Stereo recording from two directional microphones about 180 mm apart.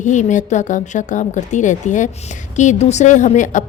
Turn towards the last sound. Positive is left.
turn(degrees=45)  # may be behind; listen again after turning